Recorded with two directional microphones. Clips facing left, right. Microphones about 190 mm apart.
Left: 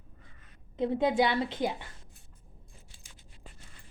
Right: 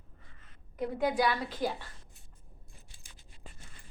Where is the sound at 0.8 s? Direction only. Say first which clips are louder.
Left 3 dB; 25° left (ahead or behind).